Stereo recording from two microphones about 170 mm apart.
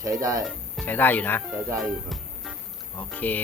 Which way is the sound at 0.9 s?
10° left (ahead or behind).